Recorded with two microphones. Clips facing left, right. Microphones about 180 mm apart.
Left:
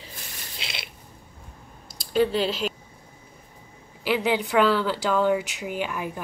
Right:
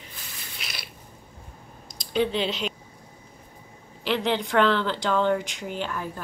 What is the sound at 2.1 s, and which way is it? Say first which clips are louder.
Speech: left 3 dB; 5° left (ahead or behind).